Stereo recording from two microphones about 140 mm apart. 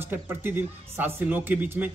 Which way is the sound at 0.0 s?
15° right (ahead or behind).